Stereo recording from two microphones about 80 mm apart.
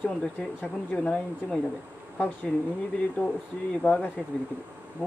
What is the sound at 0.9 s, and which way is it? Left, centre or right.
Speech, centre.